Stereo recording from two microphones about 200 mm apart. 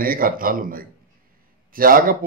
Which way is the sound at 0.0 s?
45° right (ahead or behind).